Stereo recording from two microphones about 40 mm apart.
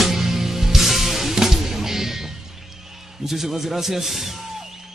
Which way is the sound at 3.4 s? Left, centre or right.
Centre.